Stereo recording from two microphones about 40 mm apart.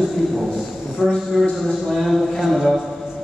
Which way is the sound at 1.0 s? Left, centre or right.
Centre.